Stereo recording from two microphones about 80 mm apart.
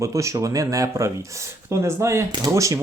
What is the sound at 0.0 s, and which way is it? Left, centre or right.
Speech, right.